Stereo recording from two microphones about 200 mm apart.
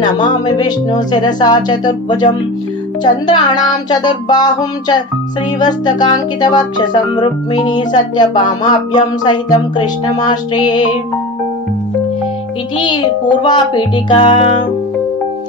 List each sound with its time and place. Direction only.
0.0 s music: 20° left (ahead or behind)
12.7 s music: 25° left (ahead or behind)